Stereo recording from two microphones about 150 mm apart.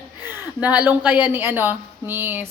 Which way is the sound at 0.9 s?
10° right (ahead or behind).